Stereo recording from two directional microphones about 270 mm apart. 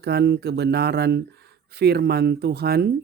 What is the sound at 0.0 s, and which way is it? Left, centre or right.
Speech, right.